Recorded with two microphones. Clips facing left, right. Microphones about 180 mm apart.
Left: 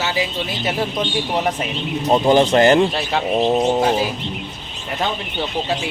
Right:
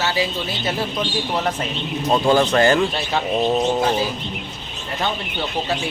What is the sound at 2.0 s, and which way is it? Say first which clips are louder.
Speech: left 3 dB; 20° left (ahead or behind).